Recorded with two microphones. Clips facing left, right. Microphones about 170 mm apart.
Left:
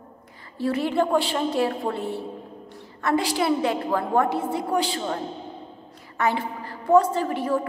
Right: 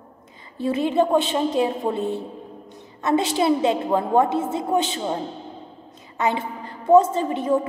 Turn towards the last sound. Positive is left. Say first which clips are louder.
# right 3 dB
turn(degrees=-20)  # may be behind; listen again after turning